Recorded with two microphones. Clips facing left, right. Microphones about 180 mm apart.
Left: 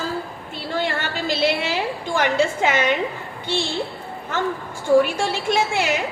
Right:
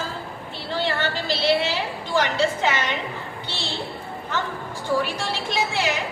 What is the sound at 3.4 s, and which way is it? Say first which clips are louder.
Speech: left 12 dB; 50° left (ahead or behind).